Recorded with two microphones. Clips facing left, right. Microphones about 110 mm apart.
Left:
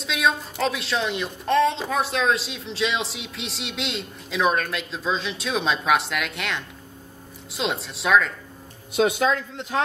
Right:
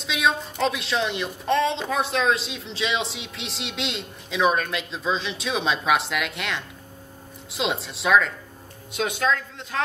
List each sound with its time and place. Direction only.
0.0 s a woman's voice: centre (ahead or behind)
8.9 s speech: 20° left (ahead or behind)